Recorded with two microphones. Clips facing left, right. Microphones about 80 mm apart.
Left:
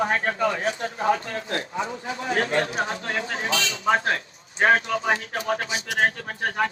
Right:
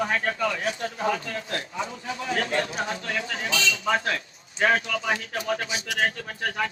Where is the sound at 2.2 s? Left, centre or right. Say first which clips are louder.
Left 3 dB; left.